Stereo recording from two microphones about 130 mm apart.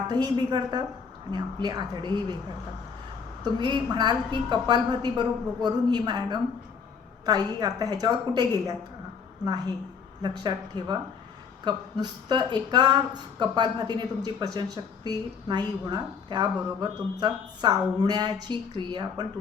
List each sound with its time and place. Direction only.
0.1 s a woman's voice: 35° right (ahead or behind)
3.4 s a woman's voice: 35° right (ahead or behind)
10.2 s a woman's voice: 35° right (ahead or behind)